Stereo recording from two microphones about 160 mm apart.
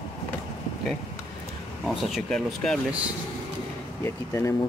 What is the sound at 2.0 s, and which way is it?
Speech, centre (ahead or behind).